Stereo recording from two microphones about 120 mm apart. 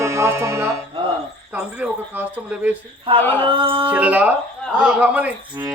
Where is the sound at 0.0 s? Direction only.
25° right (ahead or behind).